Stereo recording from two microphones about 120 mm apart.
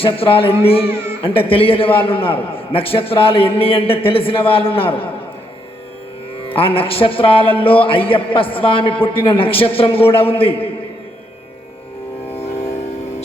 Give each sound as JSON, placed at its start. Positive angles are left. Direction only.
{"t": 0.0, "sound": "a man's voice", "side_deg": 50}
{"t": 0.9, "sound": "speech", "side_deg": -20}
{"t": 1.2, "sound": "a man's voice", "side_deg": 50}
{"t": 6.5, "sound": "a man's voice", "side_deg": 50}